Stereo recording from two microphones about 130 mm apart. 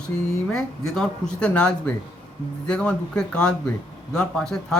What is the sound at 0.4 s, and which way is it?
A man's voice, 5° left (ahead or behind).